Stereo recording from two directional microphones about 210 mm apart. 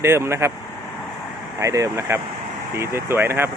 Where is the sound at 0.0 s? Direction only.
10° right (ahead or behind).